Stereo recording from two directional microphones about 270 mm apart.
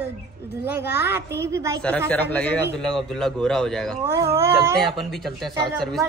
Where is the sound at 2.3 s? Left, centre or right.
Centre.